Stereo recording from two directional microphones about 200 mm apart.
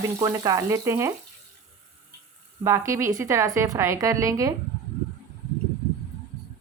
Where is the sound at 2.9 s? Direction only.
15° right (ahead or behind).